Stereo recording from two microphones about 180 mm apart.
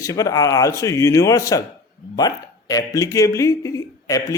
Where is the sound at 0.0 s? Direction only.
20° left (ahead or behind).